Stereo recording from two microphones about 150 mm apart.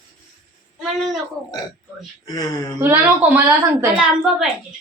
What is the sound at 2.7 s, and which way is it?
A woman's voice, 15° right (ahead or behind).